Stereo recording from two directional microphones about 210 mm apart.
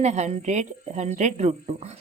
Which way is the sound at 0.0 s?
35° right (ahead or behind).